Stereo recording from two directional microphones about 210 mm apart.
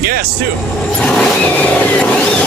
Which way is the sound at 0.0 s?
45° right (ahead or behind).